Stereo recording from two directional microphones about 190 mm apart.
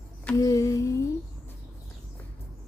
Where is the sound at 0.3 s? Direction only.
15° left (ahead or behind).